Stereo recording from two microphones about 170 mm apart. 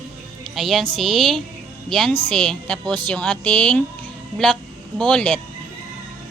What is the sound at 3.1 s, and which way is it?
Speech, 5° left (ahead or behind).